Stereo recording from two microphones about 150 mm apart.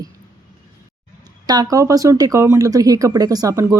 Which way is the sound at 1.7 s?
25° right (ahead or behind).